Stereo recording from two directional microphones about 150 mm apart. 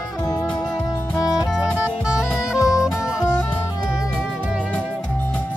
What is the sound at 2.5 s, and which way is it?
Music, 20° left (ahead or behind).